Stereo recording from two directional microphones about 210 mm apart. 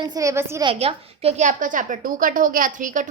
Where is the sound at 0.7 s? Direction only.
30° right (ahead or behind).